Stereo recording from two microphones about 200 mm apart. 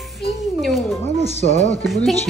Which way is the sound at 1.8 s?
Centre (ahead or behind).